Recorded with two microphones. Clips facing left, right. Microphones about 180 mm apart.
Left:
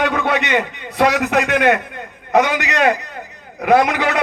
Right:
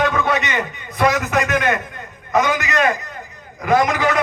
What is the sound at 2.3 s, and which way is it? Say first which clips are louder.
A man's voice: left 2 dB; 65° left (ahead or behind).